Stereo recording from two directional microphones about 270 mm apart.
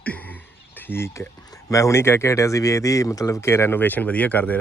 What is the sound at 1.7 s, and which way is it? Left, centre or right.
Speech, centre.